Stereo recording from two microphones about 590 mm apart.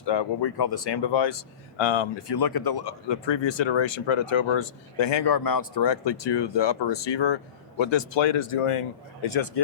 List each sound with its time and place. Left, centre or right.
0.0 s speech: left